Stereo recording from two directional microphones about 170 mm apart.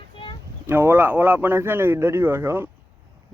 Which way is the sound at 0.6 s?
10° right (ahead or behind).